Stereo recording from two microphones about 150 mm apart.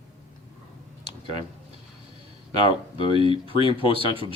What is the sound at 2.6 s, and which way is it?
Speech, 35° left (ahead or behind).